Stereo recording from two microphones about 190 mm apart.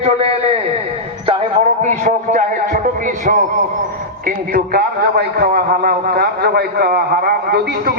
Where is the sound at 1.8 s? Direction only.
40° right (ahead or behind).